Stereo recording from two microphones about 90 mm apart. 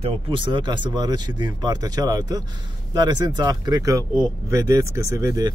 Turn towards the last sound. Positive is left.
turn(degrees=-35)  # may be behind; listen again after turning